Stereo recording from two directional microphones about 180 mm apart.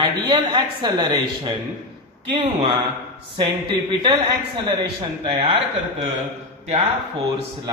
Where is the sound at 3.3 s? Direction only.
25° right (ahead or behind).